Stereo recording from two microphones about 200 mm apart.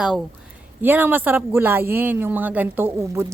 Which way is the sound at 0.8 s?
10° right (ahead or behind).